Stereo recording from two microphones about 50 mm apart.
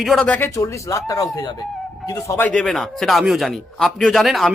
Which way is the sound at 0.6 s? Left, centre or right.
Left.